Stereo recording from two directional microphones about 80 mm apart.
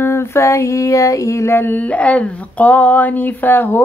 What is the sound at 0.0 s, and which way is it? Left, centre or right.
Female singing, left.